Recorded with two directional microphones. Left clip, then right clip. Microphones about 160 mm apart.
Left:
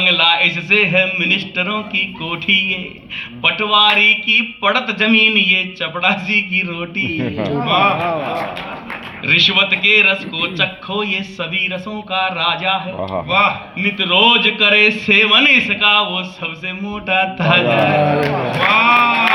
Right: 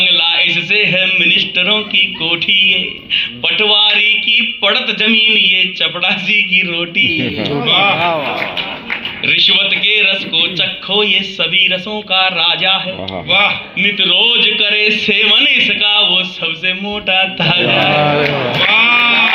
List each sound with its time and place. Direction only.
0.0 s speech: 45° left (ahead or behind)
7.2 s speech: 25° left (ahead or behind)
7.7 s speech: 45° left (ahead or behind)
9.2 s speech: 45° left (ahead or behind)
18.7 s sheep: 45° left (ahead or behind)